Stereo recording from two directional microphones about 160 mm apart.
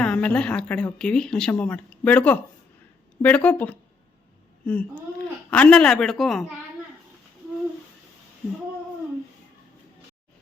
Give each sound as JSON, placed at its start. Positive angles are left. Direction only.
{"t": 0.0, "sound": "a man's voice", "side_deg": 10}